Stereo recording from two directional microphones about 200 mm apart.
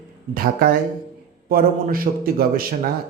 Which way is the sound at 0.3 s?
45° right (ahead or behind).